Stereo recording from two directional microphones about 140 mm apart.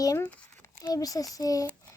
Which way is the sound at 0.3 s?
10° left (ahead or behind).